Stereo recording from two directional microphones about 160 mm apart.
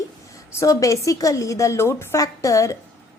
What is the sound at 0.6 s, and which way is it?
A woman's voice, 20° left (ahead or behind).